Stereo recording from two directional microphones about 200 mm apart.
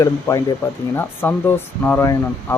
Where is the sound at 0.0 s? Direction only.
15° left (ahead or behind).